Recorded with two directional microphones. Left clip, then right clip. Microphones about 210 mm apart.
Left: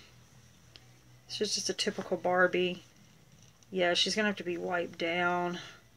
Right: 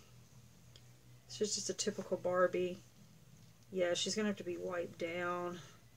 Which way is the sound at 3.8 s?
5° left (ahead or behind).